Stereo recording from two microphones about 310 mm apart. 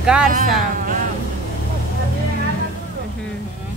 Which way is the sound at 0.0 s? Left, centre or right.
Centre.